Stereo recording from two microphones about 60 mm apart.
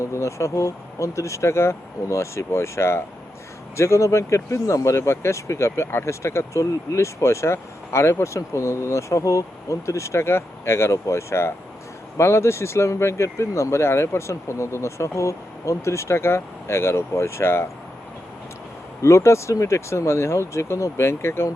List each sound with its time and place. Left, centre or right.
0.0 s speech: left
19.0 s speech: left